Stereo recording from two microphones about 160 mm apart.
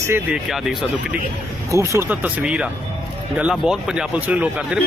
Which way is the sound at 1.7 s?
20° right (ahead or behind).